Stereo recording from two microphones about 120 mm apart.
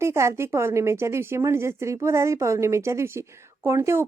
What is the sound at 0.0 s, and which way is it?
A woman's voice, 25° right (ahead or behind).